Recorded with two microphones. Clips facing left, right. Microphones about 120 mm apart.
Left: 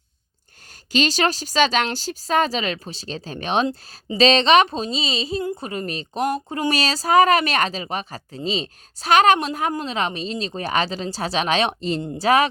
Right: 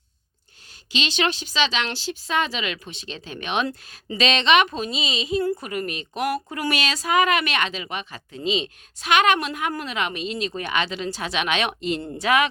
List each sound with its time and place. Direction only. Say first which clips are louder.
0.9 s a woman's voice: left 4 dB; 40° left (ahead or behind)
5.4 s a woman's voice: right 3 dB; 20° left (ahead or behind)
5.6 s a woman's voice: left 1 dB; 30° left (ahead or behind)